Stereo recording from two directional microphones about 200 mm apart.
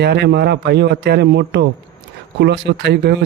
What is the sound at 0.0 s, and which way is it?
Speech, 55° right (ahead or behind).